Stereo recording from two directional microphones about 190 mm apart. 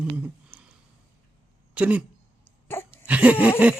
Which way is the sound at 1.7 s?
5° right (ahead or behind).